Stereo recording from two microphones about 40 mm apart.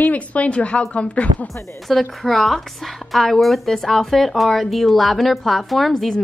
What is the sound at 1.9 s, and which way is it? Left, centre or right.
Speech, centre.